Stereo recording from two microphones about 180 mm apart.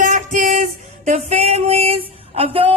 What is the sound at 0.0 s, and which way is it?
Music, 45° right (ahead or behind).